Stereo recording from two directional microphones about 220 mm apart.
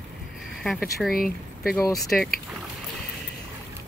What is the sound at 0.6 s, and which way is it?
Speech, centre (ahead or behind).